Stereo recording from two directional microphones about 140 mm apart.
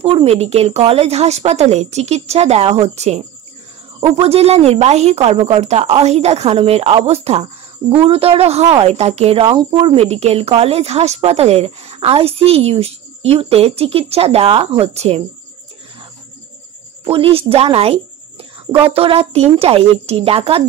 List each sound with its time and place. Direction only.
0.0 s a woman's voice: 45° right (ahead or behind)
9.5 s a woman's voice: 35° right (ahead or behind)
17.0 s a woman's voice: 40° right (ahead or behind)